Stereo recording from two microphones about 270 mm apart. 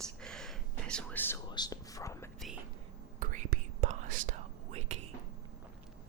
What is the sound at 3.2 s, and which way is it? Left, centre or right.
Whispering, right.